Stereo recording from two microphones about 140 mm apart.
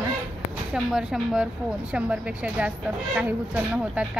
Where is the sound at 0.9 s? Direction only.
5° right (ahead or behind).